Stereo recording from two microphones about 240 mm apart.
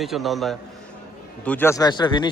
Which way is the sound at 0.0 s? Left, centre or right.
Centre.